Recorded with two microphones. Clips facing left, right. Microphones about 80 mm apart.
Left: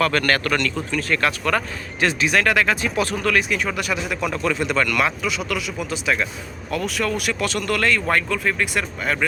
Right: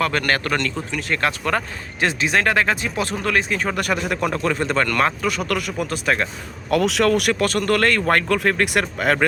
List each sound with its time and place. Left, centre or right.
0.0 s speech: centre; by 6.2 s right
6.7 s speech: right